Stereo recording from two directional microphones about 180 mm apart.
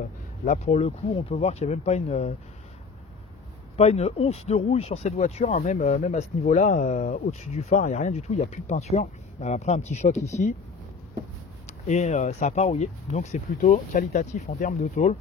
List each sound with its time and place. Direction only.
0.5 s speech: 35° left (ahead or behind)
3.7 s speech: 35° left (ahead or behind)
11.9 s speech: 40° left (ahead or behind)